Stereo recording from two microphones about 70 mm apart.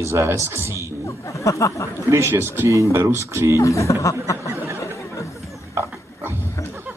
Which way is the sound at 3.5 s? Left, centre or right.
Left.